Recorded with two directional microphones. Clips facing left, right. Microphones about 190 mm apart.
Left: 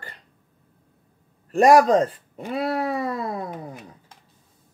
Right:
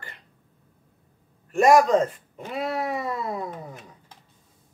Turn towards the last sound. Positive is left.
turn(degrees=35)  # may be behind; listen again after turning